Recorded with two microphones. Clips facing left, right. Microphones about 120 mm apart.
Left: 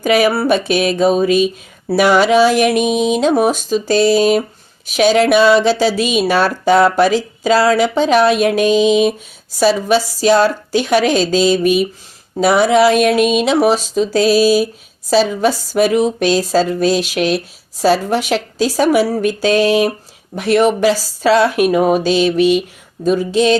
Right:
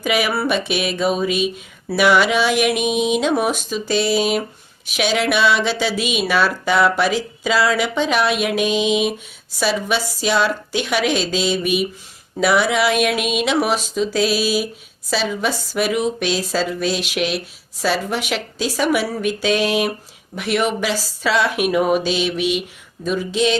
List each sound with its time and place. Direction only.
0.0 s speech: 40° left (ahead or behind)